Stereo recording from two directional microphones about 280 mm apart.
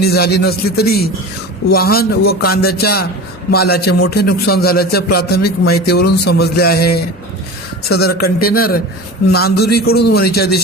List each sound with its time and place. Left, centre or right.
0.0 s a man's voice: left